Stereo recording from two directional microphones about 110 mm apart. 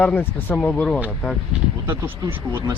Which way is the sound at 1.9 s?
25° right (ahead or behind).